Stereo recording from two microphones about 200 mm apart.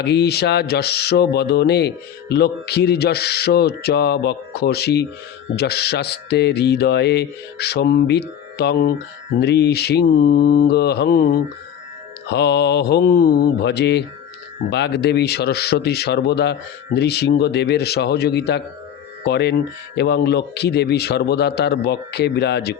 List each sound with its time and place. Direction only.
0.0 s speech: 55° left (ahead or behind)
12.3 s speech: 55° left (ahead or behind)